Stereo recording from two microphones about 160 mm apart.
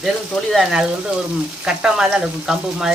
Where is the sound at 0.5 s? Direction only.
Centre (ahead or behind).